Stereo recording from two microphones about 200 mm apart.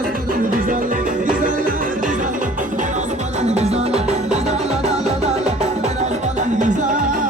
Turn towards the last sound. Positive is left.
turn(degrees=-40)  # may be behind; listen again after turning